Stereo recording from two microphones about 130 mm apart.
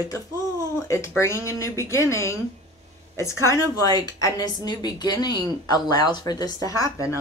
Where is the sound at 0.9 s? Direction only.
20° left (ahead or behind).